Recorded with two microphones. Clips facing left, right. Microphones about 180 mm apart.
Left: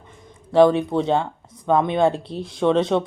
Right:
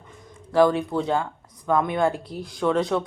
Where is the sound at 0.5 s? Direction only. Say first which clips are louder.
Left 4 dB; 25° left (ahead or behind).